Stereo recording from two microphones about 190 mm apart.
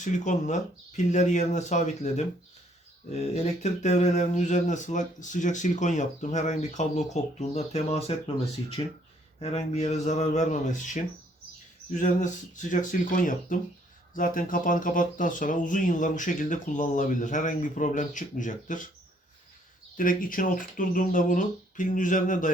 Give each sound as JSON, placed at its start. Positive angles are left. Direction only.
{"t": 0.0, "sound": "speech", "side_deg": 40}
{"t": 20.0, "sound": "speech", "side_deg": 45}